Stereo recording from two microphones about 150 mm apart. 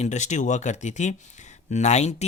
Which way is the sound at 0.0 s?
50° left (ahead or behind).